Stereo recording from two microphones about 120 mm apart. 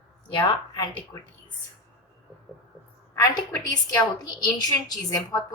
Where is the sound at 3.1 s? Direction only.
25° left (ahead or behind).